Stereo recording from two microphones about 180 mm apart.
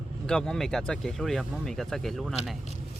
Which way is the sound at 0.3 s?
5° left (ahead or behind).